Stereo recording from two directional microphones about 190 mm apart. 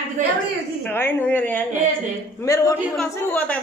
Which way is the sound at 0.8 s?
10° left (ahead or behind).